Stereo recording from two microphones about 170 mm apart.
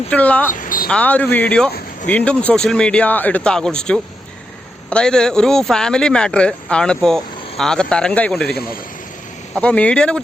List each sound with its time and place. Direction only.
0.1 s speech: 10° left (ahead or behind)
0.6 s a sound: 55° left (ahead or behind)
0.9 s speech: 10° left (ahead or behind)
8.4 s speech: 65° left (ahead or behind)
9.6 s speech: 5° left (ahead or behind)